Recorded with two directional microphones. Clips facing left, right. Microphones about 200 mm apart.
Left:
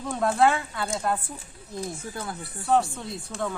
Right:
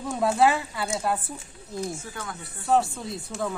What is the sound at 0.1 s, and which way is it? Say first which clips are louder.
Speech: even; 5° right (ahead or behind).